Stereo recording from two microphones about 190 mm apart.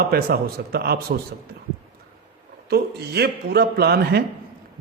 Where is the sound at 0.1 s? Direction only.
55° right (ahead or behind).